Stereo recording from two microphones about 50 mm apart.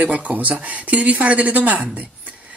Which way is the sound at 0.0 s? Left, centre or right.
Right.